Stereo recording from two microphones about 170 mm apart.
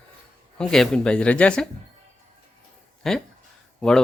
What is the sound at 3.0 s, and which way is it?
Speech, centre (ahead or behind).